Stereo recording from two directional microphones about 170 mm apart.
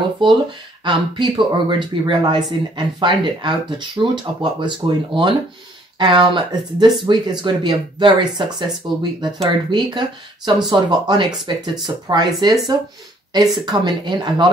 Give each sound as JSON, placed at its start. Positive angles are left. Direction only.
{"t": 0.8, "sound": "speech", "side_deg": -30}